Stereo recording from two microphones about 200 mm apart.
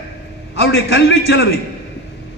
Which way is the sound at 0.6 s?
70° left (ahead or behind).